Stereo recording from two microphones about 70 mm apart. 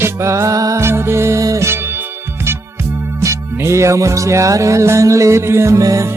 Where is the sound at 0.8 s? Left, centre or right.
Right.